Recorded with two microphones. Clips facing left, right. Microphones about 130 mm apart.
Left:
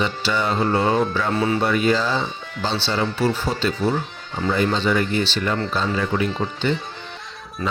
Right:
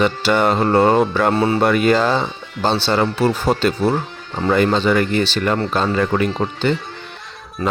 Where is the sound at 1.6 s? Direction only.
65° right (ahead or behind).